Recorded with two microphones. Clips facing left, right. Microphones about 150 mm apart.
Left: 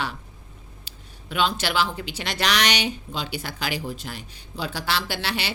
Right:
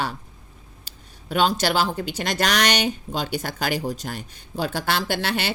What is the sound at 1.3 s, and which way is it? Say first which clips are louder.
Speech: right 4 dB; 40° right (ahead or behind).